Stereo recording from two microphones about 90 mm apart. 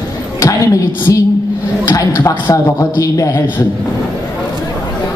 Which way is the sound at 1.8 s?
40° left (ahead or behind).